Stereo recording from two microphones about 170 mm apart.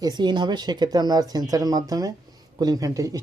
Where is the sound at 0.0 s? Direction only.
25° right (ahead or behind).